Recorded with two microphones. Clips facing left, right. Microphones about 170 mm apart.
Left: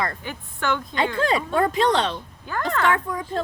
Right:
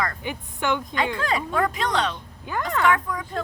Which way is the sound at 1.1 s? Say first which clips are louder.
Left 6 dB; 30° left (ahead or behind).